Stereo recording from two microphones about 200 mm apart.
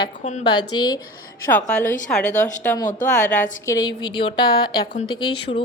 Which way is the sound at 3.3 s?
10° left (ahead or behind).